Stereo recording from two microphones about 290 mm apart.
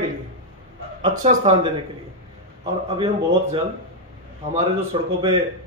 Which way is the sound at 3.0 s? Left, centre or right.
Centre.